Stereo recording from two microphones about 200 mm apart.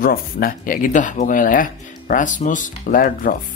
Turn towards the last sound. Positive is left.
turn(degrees=45)  # may be behind; listen again after turning